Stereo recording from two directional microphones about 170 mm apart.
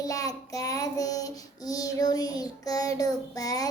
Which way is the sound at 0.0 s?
20° left (ahead or behind).